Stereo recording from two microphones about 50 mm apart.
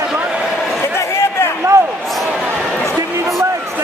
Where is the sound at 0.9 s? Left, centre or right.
Left.